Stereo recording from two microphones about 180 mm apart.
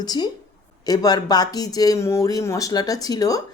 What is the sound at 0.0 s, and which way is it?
Speech, 25° left (ahead or behind).